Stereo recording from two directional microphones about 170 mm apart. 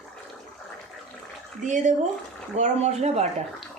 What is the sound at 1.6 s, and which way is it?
A woman's voice, 45° right (ahead or behind).